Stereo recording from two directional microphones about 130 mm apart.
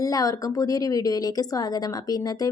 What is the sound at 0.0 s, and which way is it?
A woman's voice, 25° left (ahead or behind).